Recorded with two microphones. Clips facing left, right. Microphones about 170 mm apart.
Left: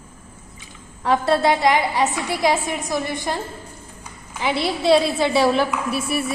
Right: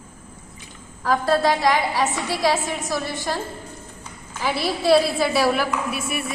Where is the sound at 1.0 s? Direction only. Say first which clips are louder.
Left 1 dB; 25° left (ahead or behind).